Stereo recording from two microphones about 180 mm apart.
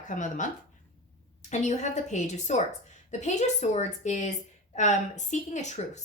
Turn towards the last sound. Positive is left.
turn(degrees=40)  # may be behind; listen again after turning